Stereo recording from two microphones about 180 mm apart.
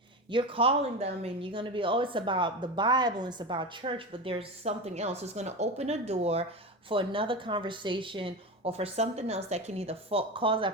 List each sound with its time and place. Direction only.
0.3 s speech: 30° right (ahead or behind)